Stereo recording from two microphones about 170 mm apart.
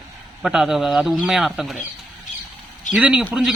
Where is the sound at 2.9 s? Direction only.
5° right (ahead or behind).